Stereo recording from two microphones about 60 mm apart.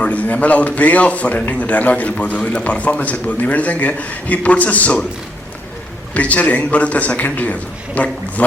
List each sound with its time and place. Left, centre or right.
0.0 s a man's voice: left
6.1 s a man's voice: left